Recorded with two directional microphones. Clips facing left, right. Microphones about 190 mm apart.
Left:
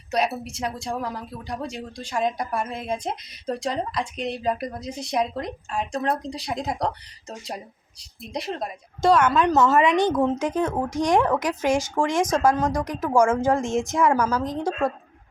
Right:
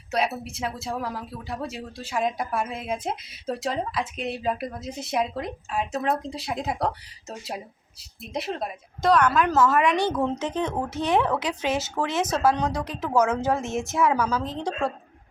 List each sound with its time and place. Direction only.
0.1 s speech: centre (ahead or behind)
9.0 s a woman's voice: 25° left (ahead or behind)
10.2 s speech: 10° left (ahead or behind)